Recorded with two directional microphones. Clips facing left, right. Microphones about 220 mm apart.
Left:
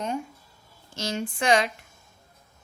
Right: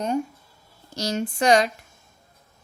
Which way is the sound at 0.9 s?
40° right (ahead or behind).